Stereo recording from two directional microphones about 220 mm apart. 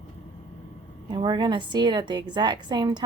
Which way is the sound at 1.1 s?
20° right (ahead or behind).